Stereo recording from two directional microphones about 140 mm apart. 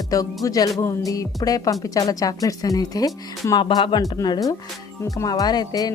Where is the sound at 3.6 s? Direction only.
35° left (ahead or behind).